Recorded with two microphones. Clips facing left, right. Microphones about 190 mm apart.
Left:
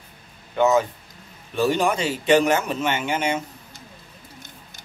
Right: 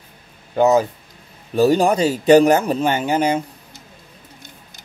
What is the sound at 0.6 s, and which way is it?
Speech, 35° right (ahead or behind).